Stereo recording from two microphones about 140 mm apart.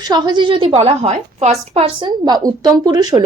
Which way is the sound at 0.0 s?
30° right (ahead or behind).